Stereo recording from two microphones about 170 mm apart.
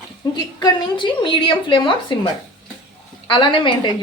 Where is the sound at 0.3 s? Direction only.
25° left (ahead or behind).